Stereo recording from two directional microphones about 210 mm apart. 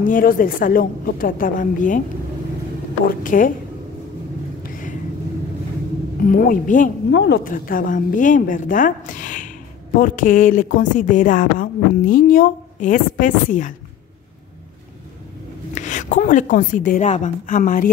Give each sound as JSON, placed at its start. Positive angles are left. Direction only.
{"t": 0.0, "sound": "speech", "side_deg": 40}
{"t": 3.1, "sound": "speech", "side_deg": 40}
{"t": 4.6, "sound": "vehicle", "side_deg": 40}
{"t": 6.2, "sound": "speech", "side_deg": 40}
{"t": 7.1, "sound": "speech", "side_deg": 55}
{"t": 15.7, "sound": "speech", "side_deg": 35}